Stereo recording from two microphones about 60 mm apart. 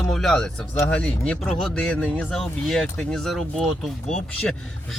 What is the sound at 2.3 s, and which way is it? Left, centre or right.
Speech, centre.